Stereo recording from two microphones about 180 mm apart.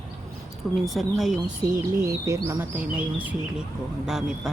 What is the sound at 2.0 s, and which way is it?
Speech, 15° right (ahead or behind).